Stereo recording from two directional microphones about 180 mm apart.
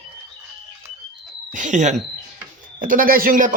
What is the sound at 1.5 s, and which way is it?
Speech, 45° right (ahead or behind).